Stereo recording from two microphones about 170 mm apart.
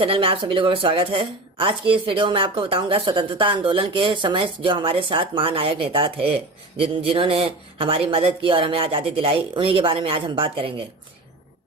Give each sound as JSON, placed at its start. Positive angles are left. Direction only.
{"t": 0.0, "sound": "a woman's voice", "side_deg": -30}